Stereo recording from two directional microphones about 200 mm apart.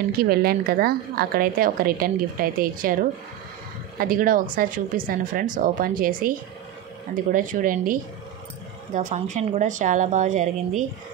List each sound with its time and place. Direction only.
0.2 s a woman's voice: 50° right (ahead or behind)